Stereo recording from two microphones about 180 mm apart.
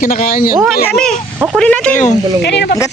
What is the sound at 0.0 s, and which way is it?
Speech, 50° left (ahead or behind).